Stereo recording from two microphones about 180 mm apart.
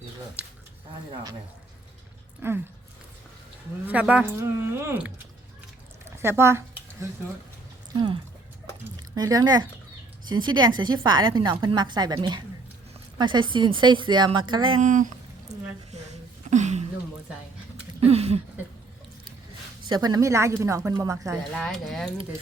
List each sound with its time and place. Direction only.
0.4 s speech: 5° right (ahead or behind)
2.4 s speech: 10° right (ahead or behind)
3.8 s speech: 10° right (ahead or behind)
6.2 s speech: 15° right (ahead or behind)
9.0 s a woman's voice: 20° right (ahead or behind)
14.8 s speech: 45° right (ahead or behind)
15.5 s a sound: 40° right (ahead or behind)
15.9 s a woman's voice: 40° right (ahead or behind)
16.5 s a sound: 40° right (ahead or behind)
18.0 s a sound: 35° right (ahead or behind)
19.9 s a woman's voice: 20° right (ahead or behind)
21.5 s speech: 5° left (ahead or behind)